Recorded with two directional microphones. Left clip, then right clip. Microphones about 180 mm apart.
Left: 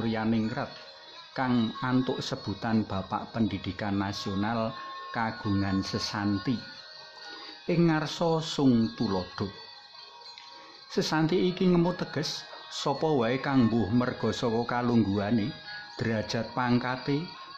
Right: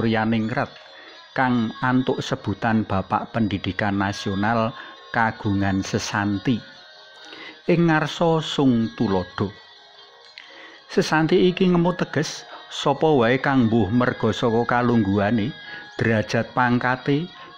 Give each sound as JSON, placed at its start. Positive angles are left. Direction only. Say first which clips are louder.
{"t": 0.0, "sound": "speech", "louder": "right 8 dB", "side_deg": -25}
{"t": 7.9, "sound": "speech", "louder": "right 8 dB", "side_deg": -25}
{"t": 10.9, "sound": "speech", "louder": "right 8 dB", "side_deg": -25}